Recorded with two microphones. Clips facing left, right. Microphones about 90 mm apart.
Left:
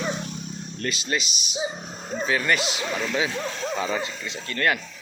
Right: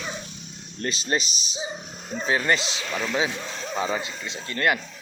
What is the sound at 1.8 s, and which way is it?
Dog, 40° left (ahead or behind).